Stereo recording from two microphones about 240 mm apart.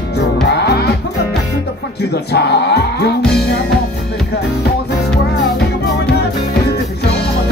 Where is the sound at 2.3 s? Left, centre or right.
Left.